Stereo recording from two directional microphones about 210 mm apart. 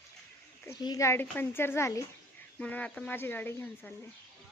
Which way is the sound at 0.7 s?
15° left (ahead or behind).